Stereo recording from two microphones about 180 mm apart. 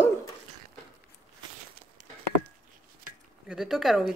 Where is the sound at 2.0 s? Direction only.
45° right (ahead or behind).